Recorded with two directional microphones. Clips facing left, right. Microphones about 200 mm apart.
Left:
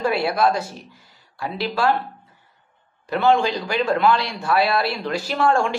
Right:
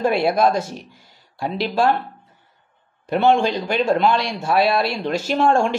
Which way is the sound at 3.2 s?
20° right (ahead or behind).